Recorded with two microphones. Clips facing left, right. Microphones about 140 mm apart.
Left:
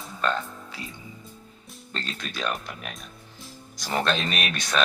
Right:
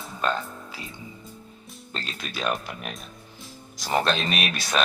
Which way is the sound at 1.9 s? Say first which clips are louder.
Left 1 dB; 5° right (ahead or behind).